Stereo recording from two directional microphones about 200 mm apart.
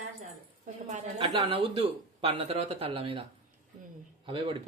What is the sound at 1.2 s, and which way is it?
Speech, 25° right (ahead or behind).